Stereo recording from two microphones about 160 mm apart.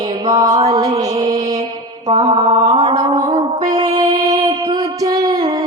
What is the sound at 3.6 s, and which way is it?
Music, 25° right (ahead or behind).